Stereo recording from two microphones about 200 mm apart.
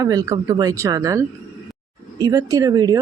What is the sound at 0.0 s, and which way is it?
Speech, 20° right (ahead or behind).